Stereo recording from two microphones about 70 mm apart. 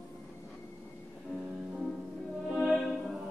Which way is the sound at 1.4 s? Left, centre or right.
Centre.